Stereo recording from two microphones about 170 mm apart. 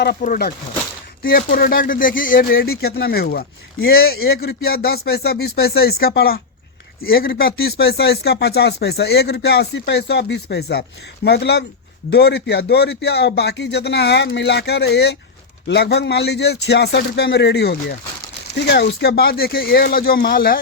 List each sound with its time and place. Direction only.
0.0 s speech: 70° left (ahead or behind)
0.3 s speech: 60° left (ahead or behind)